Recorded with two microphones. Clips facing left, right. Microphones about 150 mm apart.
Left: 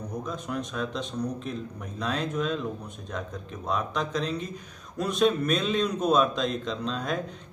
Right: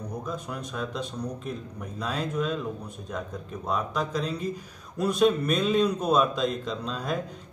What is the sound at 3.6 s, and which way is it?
A man's voice, 5° right (ahead or behind).